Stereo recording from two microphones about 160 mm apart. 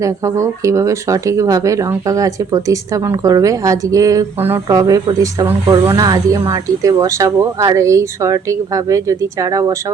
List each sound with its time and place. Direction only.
0.0 s speech: 20° right (ahead or behind)